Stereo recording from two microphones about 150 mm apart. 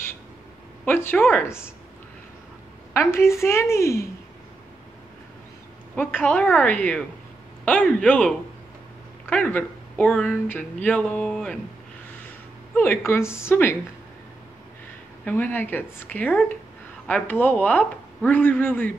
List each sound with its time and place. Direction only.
0.8 s speech: 15° left (ahead or behind)
2.9 s speech: 15° left (ahead or behind)
5.9 s a woman's voice: 10° left (ahead or behind)
12.7 s speech: 15° left (ahead or behind)
15.2 s speech: 10° left (ahead or behind)